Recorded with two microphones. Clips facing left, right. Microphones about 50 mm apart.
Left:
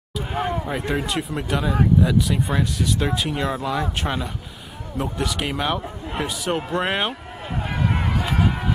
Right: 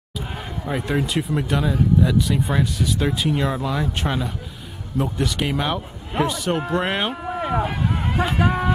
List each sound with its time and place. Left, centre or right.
0.7 s speech: centre
7.3 s run: right